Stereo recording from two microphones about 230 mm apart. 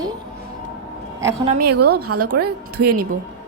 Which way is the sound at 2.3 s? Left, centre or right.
Right.